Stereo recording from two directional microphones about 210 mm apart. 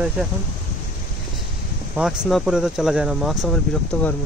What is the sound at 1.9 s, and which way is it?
Speech, centre (ahead or behind).